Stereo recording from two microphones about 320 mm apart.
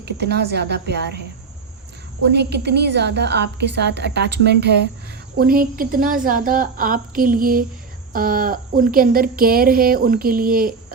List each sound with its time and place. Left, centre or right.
0.0 s a woman's voice: right
2.2 s a woman's voice: right